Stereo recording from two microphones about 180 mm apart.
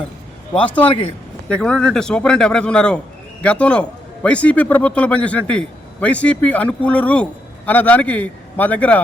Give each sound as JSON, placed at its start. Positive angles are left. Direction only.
{"t": 0.5, "sound": "a man's voice", "side_deg": 5}
{"t": 0.9, "sound": "a man's voice", "side_deg": 30}
{"t": 1.5, "sound": "a man's voice", "side_deg": 5}